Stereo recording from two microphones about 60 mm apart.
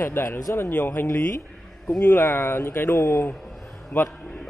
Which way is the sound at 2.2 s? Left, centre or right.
Left.